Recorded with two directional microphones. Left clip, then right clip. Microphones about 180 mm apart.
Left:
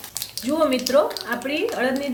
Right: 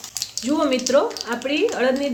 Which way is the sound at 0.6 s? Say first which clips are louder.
Even; 30° right (ahead or behind).